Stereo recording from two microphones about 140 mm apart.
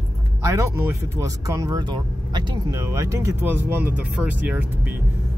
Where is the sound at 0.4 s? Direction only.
20° right (ahead or behind).